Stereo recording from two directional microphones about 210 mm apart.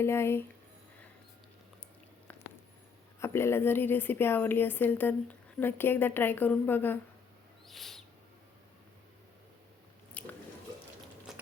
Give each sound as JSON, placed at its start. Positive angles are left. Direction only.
{"t": 0.0, "sound": "a woman's voice", "side_deg": 10}
{"t": 3.2, "sound": "a woman's voice", "side_deg": 10}
{"t": 7.7, "sound": "owl", "side_deg": 0}
{"t": 10.2, "sound": "chewing", "side_deg": 5}
{"t": 11.3, "sound": "a sound", "side_deg": 0}